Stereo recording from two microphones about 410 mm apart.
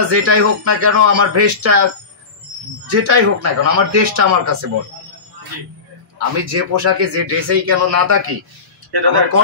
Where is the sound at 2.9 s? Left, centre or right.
Right.